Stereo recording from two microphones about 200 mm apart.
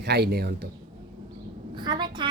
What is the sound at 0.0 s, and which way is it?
Speech, 55° right (ahead or behind).